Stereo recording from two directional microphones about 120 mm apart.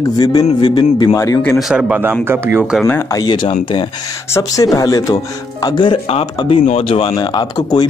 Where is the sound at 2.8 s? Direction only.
25° left (ahead or behind).